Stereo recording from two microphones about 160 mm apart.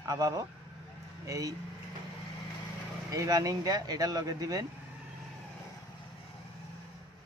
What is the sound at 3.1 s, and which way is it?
A man's voice, 20° right (ahead or behind).